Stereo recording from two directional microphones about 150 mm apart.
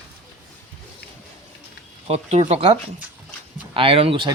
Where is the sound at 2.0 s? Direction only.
45° right (ahead or behind).